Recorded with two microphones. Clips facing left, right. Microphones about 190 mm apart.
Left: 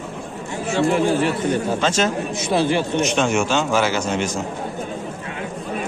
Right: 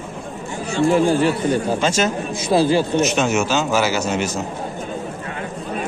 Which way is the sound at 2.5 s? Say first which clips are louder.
Right 3 dB; 35° right (ahead or behind).